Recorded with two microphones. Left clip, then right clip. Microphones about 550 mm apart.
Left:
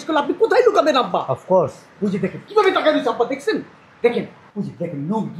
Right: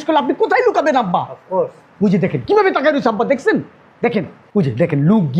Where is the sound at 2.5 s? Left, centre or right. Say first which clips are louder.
Right 2 dB; right.